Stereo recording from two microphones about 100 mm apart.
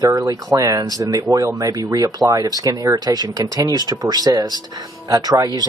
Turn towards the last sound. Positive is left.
turn(degrees=-40)  # may be behind; listen again after turning